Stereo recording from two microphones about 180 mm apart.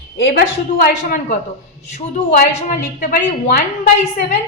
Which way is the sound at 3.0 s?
50° left (ahead or behind).